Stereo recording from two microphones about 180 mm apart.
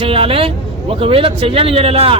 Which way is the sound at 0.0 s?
30° right (ahead or behind).